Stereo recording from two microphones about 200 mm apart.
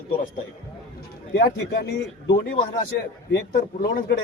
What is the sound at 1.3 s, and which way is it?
Speech, 55° left (ahead or behind).